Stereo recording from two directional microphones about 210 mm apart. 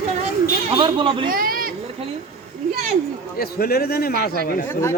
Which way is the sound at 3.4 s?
45° left (ahead or behind).